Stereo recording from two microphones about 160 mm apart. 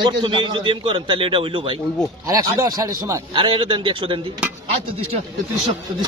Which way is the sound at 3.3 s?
30° right (ahead or behind).